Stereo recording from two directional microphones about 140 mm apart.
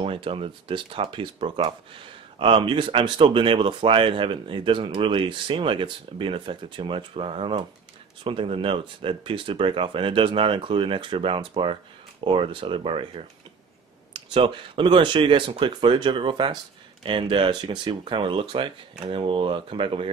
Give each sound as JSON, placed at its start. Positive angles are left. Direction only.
{"t": 0.0, "sound": "speech", "side_deg": -40}